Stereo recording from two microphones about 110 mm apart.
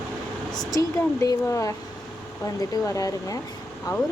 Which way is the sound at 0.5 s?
35° left (ahead or behind).